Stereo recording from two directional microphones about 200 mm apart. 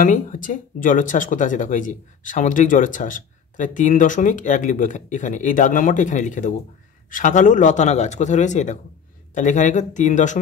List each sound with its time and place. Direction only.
0.0 s speech: 40° left (ahead or behind)